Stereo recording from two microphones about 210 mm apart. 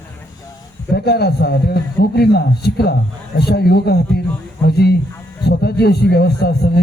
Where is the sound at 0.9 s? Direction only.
50° left (ahead or behind).